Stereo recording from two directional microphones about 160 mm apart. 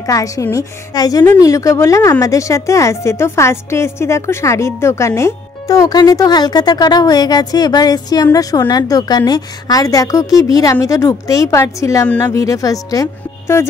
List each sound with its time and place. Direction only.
0.0 s a woman's voice: 20° left (ahead or behind)